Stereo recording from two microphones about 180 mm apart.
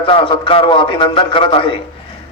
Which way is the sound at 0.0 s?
30° left (ahead or behind).